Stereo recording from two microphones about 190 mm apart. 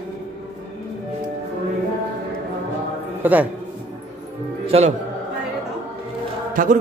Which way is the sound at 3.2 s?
10° right (ahead or behind).